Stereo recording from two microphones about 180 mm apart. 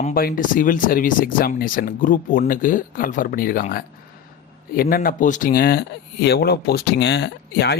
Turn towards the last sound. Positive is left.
turn(degrees=70)  # may be behind; listen again after turning